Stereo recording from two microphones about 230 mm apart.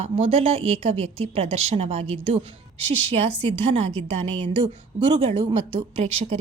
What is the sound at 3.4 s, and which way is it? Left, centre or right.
A woman's voice, right.